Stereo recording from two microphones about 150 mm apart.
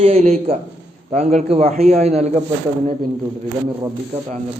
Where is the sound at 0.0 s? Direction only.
45° right (ahead or behind).